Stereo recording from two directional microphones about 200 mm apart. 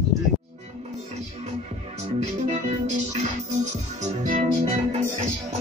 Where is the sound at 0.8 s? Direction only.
35° right (ahead or behind).